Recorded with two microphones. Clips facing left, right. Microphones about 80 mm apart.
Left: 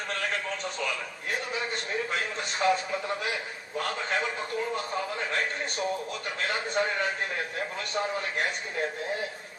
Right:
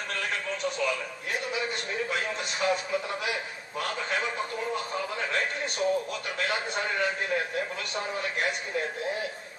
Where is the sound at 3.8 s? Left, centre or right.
Left.